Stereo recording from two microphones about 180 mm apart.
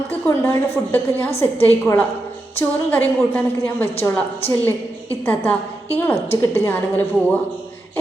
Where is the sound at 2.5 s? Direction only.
10° left (ahead or behind).